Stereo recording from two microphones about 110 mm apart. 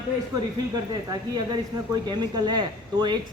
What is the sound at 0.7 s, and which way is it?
Speech, 35° right (ahead or behind).